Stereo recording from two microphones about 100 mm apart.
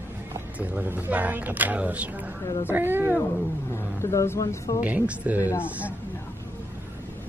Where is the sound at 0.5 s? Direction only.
20° right (ahead or behind).